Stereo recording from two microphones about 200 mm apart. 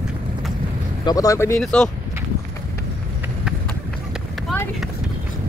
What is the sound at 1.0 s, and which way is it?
Speech, 15° left (ahead or behind).